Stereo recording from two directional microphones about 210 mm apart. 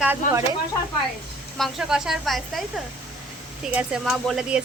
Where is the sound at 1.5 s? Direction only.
Centre (ahead or behind).